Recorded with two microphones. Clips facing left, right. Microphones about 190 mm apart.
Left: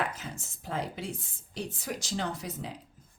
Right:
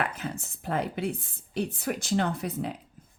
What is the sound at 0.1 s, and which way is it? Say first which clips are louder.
Speech: right 6 dB; 60° right (ahead or behind).